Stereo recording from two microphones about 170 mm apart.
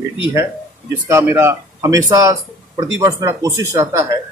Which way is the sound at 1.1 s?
15° right (ahead or behind).